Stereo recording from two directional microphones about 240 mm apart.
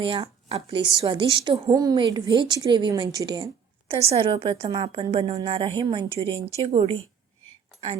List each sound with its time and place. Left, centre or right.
0.0 s a woman's voice: right